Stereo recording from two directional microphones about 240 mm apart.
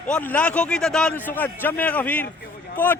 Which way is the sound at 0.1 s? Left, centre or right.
Centre.